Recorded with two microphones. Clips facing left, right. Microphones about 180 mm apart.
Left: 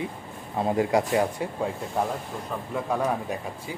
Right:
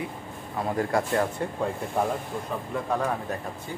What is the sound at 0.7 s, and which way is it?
Speech, 15° left (ahead or behind).